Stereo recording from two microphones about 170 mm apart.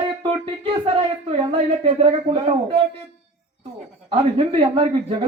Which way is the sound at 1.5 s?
35° right (ahead or behind).